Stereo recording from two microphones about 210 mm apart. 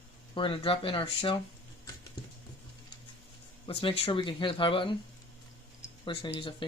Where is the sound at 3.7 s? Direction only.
25° left (ahead or behind).